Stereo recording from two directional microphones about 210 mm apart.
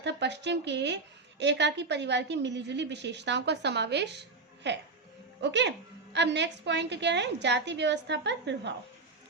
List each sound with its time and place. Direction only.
0.0 s a woman's voice: 55° right (ahead or behind)